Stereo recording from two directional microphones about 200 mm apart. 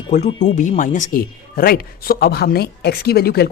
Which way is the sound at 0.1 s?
35° left (ahead or behind).